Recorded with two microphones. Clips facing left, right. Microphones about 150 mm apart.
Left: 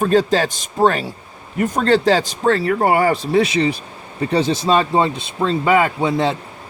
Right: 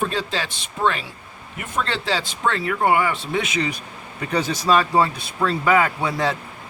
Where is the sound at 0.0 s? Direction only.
45° left (ahead or behind).